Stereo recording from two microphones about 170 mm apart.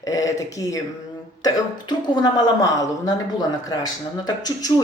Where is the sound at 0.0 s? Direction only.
20° left (ahead or behind).